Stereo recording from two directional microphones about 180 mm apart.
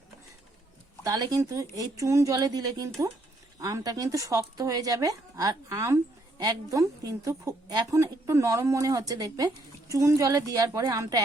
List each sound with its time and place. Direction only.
1.0 s a woman's voice: 20° right (ahead or behind)